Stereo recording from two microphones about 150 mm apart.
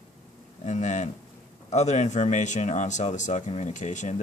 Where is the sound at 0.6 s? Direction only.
50° left (ahead or behind).